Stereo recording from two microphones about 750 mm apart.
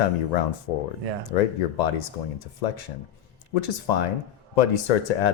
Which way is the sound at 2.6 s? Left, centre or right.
Left.